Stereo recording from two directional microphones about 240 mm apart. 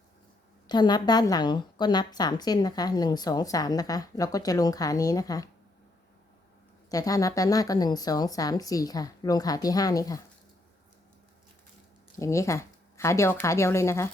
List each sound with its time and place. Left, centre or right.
0.7 s a woman's voice: centre
6.9 s a woman's voice: centre
12.2 s a woman's voice: centre